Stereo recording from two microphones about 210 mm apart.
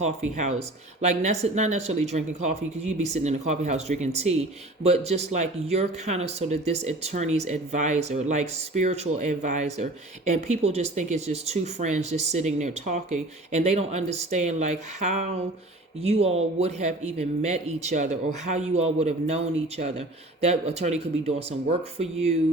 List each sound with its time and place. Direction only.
0.0 s speech: 35° right (ahead or behind)